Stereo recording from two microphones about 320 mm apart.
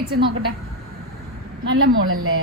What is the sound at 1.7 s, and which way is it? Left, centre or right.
Speech, right.